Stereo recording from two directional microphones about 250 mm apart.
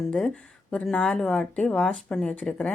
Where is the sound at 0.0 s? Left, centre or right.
Centre.